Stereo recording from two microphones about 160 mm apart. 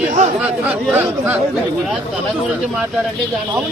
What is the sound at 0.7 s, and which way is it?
Speech, 10° right (ahead or behind).